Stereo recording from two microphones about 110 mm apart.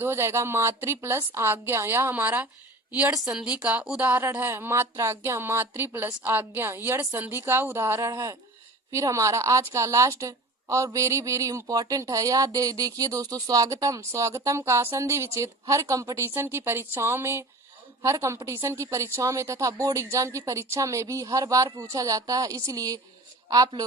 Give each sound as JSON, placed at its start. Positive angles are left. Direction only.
{"t": 0.0, "sound": "a woman's voice", "side_deg": -25}